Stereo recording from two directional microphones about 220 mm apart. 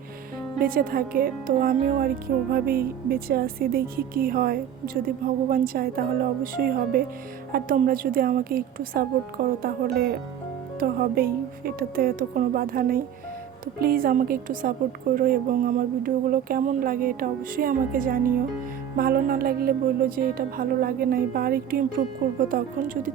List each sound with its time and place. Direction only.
0.6 s a woman's voice: 40° right (ahead or behind)